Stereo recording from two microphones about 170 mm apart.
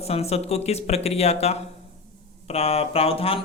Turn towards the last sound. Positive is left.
turn(degrees=35)  # may be behind; listen again after turning